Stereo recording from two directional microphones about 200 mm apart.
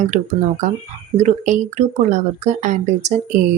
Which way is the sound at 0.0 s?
35° right (ahead or behind).